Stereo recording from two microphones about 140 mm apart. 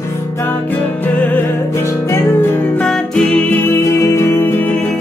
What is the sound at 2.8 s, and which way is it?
Music, 5° left (ahead or behind).